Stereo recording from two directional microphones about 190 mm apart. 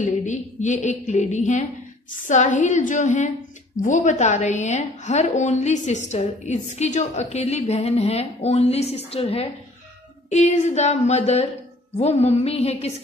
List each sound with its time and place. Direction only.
0.0 s a woman's voice: 40° left (ahead or behind)